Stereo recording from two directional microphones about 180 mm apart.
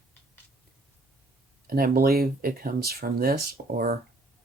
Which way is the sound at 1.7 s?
55° right (ahead or behind).